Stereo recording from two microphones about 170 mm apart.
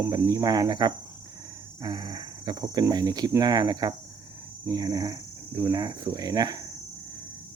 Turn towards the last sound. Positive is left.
turn(degrees=-25)  # may be behind; listen again after turning